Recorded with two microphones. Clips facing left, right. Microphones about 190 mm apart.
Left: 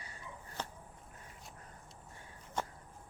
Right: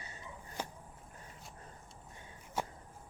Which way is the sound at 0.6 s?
10° right (ahead or behind).